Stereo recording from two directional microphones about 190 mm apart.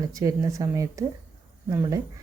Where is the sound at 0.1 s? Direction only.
15° right (ahead or behind).